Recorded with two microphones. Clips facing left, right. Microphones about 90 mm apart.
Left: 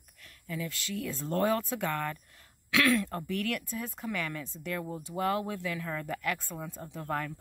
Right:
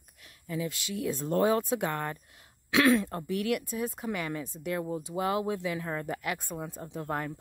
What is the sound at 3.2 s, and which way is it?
Speech, 15° right (ahead or behind).